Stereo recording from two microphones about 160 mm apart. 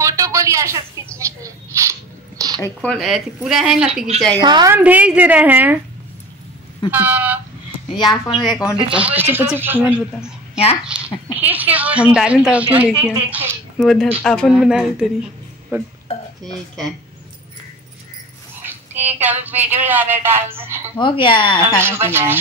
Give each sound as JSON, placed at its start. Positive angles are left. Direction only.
{"t": 0.0, "sound": "a sound", "side_deg": -20}
{"t": 2.6, "sound": "speech", "side_deg": 5}
{"t": 4.4, "sound": "a woman's voice", "side_deg": -25}
{"t": 4.7, "sound": "a woman's voice", "side_deg": -10}
{"t": 6.9, "sound": "a woman's voice", "side_deg": -10}
{"t": 8.0, "sound": "a woman's voice", "side_deg": 30}
{"t": 8.9, "sound": "a woman's voice", "side_deg": -10}
{"t": 13.7, "sound": "speech", "side_deg": 0}
{"t": 15.7, "sound": "a woman's voice", "side_deg": -15}
{"t": 18.6, "sound": "a sound", "side_deg": -10}
{"t": 19.2, "sound": "a woman's voice", "side_deg": -10}
{"t": 21.0, "sound": "speech", "side_deg": 30}
{"t": 21.8, "sound": "a woman's voice", "side_deg": -15}